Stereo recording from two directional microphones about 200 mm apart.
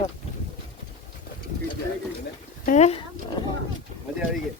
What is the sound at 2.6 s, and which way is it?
Speech, 35° left (ahead or behind).